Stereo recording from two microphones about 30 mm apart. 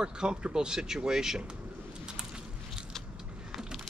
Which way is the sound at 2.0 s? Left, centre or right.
Right.